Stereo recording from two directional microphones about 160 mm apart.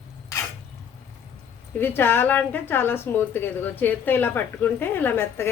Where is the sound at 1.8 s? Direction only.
15° left (ahead or behind).